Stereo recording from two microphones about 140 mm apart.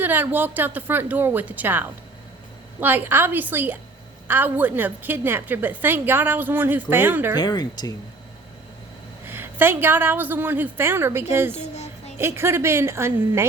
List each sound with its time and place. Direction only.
0.0 s a woman's voice: 15° right (ahead or behind)
7.3 s speech: 30° left (ahead or behind)
9.2 s a woman's voice: 15° right (ahead or behind)
11.5 s music: 55° left (ahead or behind)
12.1 s a woman's voice: 15° right (ahead or behind)